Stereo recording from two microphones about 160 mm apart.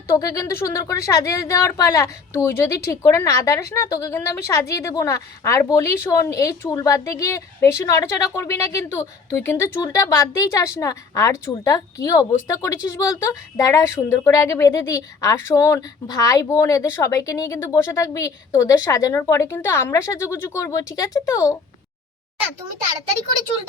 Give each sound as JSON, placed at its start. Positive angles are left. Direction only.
{"t": 0.1, "sound": "a woman's voice", "side_deg": 20}